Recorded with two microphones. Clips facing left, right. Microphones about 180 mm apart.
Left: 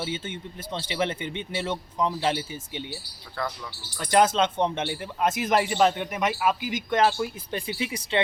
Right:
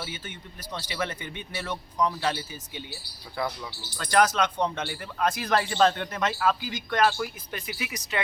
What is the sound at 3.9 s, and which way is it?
Speech, 20° left (ahead or behind).